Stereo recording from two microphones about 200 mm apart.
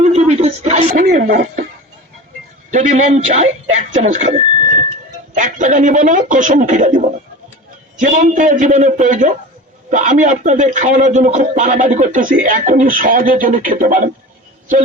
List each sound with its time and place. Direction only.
0.0 s speech: 35° right (ahead or behind)
2.7 s a man's voice: 40° right (ahead or behind)